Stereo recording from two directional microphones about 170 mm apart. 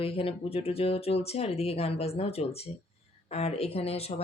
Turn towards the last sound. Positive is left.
turn(degrees=35)  # may be behind; listen again after turning